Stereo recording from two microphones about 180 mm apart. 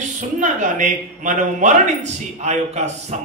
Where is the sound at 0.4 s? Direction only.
45° right (ahead or behind).